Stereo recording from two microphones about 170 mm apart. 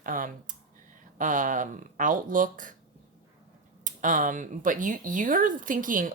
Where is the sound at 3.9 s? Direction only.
50° right (ahead or behind).